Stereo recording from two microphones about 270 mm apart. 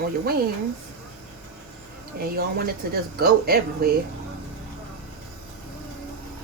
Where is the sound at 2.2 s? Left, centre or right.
Right.